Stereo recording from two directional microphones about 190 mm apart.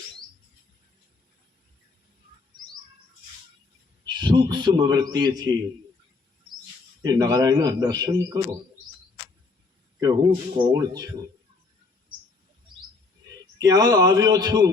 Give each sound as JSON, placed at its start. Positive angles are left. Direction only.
{"t": 4.0, "sound": "a man's voice", "side_deg": -25}
{"t": 7.0, "sound": "a man's voice", "side_deg": -20}
{"t": 10.0, "sound": "a man's voice", "side_deg": -20}
{"t": 13.6, "sound": "a man's voice", "side_deg": -20}